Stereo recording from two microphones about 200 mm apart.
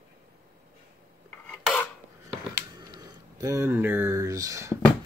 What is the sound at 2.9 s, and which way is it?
Speech, 15° right (ahead or behind).